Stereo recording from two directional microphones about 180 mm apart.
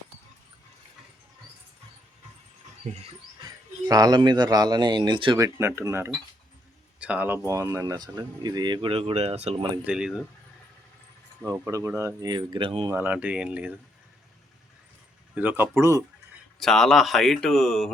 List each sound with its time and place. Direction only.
2.8 s speech: 40° right (ahead or behind)
3.8 s speech: 20° right (ahead or behind)
5.5 s speech: 15° right (ahead or behind); by 9.6 s 35° right (ahead or behind)
9.8 s speech: 5° right (ahead or behind)
11.4 s speech: 15° right (ahead or behind)
12.9 s speech: 10° right (ahead or behind)
15.4 s speech: 10° right (ahead or behind)
16.6 s speech: centre (ahead or behind)